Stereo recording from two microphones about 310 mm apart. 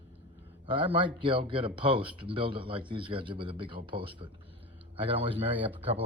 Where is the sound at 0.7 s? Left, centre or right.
Centre.